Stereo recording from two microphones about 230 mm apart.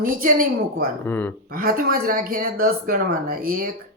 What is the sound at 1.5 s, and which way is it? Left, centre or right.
Speech, right.